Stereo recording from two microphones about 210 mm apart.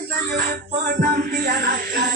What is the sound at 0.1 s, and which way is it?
Music, 45° right (ahead or behind).